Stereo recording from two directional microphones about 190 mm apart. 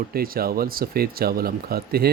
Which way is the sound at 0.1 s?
50° right (ahead or behind).